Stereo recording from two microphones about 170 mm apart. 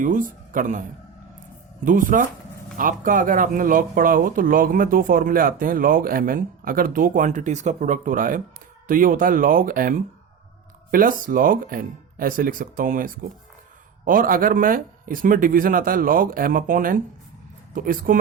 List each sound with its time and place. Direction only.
0.0 s speech: 50° right (ahead or behind)